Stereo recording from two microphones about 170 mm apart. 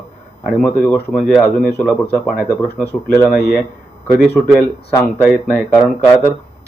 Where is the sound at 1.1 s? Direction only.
10° left (ahead or behind).